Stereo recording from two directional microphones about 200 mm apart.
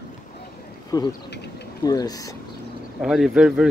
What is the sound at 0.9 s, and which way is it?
Speech, 15° left (ahead or behind).